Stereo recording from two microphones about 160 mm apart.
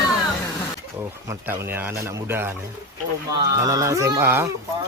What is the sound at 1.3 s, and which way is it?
Speech, 15° right (ahead or behind).